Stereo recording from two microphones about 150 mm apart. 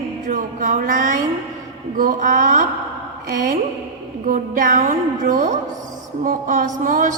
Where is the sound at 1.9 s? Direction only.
60° right (ahead or behind).